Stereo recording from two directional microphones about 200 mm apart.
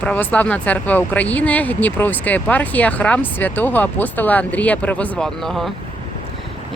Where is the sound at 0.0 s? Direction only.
5° left (ahead or behind).